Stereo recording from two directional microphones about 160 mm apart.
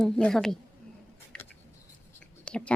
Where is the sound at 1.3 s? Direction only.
5° left (ahead or behind).